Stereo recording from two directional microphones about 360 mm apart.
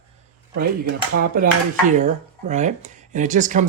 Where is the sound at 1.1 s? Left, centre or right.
Right.